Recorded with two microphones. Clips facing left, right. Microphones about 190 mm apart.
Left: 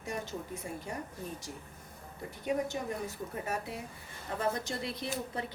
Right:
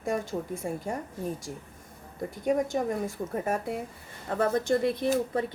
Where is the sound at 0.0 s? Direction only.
45° right (ahead or behind).